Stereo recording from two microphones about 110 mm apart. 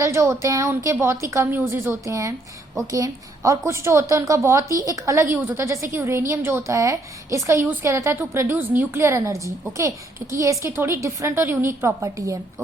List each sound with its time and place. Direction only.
0.0 s a woman's voice: 25° right (ahead or behind)